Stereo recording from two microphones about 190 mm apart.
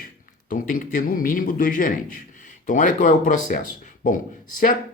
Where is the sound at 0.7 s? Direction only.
45° left (ahead or behind).